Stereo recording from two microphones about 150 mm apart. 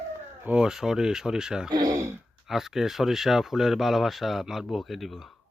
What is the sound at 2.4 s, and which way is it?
Speech, centre (ahead or behind).